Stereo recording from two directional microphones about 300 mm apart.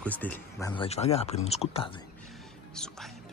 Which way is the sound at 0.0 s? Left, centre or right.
Centre.